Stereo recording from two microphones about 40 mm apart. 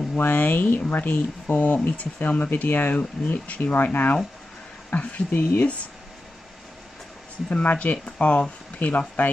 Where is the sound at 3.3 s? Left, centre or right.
Left.